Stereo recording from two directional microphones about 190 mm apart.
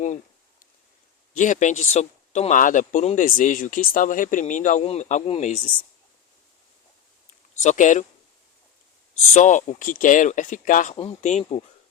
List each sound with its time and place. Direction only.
1.3 s speech: 40° left (ahead or behind)
7.5 s speech: 40° left (ahead or behind)
9.1 s speech: 40° left (ahead or behind)